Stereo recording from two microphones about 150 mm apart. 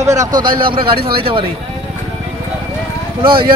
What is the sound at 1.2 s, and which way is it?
Speech, 35° right (ahead or behind).